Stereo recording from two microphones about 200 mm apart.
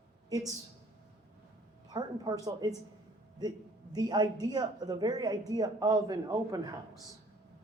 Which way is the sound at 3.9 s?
20° right (ahead or behind).